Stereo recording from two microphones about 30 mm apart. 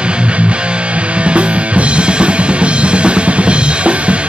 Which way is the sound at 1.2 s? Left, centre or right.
Right.